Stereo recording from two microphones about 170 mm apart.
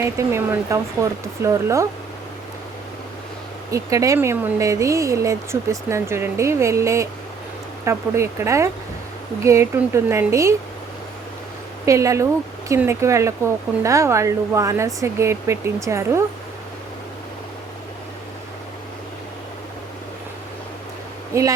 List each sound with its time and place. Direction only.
0.0 s speech: 15° right (ahead or behind)
3.7 s speech: 20° right (ahead or behind)
11.9 s speech: 20° right (ahead or behind)